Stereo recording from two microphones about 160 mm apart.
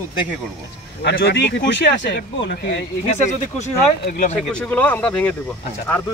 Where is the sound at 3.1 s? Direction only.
45° left (ahead or behind).